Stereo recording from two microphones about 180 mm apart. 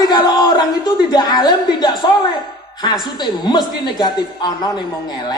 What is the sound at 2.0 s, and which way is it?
Music, 20° left (ahead or behind).